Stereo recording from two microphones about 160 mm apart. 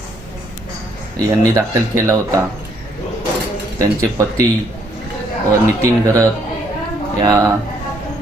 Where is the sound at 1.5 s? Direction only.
20° right (ahead or behind).